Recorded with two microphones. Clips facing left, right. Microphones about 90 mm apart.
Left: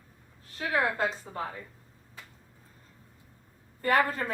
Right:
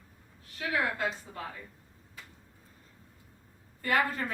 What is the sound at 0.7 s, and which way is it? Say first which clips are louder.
Speech: left 3 dB; 35° left (ahead or behind).